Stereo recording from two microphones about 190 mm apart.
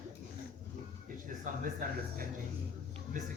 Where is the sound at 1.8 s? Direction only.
50° right (ahead or behind).